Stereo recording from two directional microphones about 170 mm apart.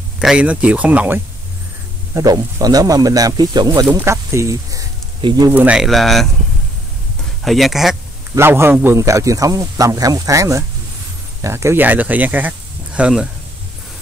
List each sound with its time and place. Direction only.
0.2 s speech: 5° right (ahead or behind)
2.1 s speech: 20° right (ahead or behind)
5.5 s speech: 10° right (ahead or behind)
7.4 s speech: centre (ahead or behind)
8.4 s a man's voice: 15° right (ahead or behind)